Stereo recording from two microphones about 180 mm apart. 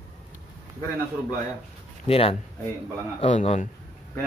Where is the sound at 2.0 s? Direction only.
30° left (ahead or behind).